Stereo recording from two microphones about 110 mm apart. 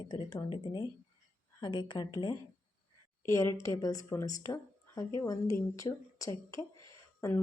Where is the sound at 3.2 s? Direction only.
30° left (ahead or behind).